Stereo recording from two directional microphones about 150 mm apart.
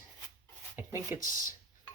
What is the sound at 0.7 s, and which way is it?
Speech, 20° right (ahead or behind).